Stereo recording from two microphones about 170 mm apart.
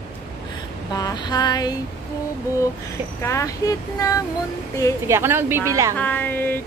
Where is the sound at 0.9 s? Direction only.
25° left (ahead or behind).